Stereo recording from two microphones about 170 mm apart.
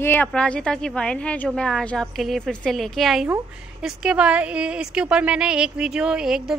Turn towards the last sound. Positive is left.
turn(degrees=-5)  # may be behind; listen again after turning